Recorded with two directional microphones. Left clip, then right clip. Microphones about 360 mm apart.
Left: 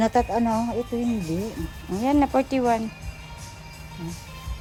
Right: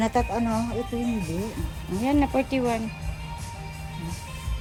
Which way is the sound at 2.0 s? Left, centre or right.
Left.